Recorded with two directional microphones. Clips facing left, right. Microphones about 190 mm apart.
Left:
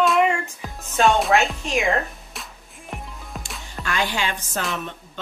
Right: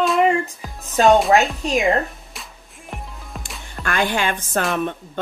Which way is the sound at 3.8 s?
55° right (ahead or behind).